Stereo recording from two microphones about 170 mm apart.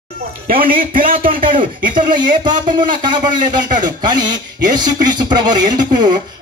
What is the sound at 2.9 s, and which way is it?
A man's voice, 25° right (ahead or behind).